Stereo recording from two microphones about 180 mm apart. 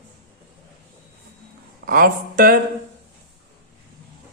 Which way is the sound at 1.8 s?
50° right (ahead or behind).